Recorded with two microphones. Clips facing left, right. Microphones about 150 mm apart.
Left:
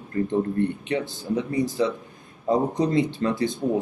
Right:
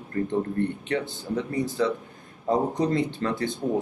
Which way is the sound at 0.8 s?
15° left (ahead or behind).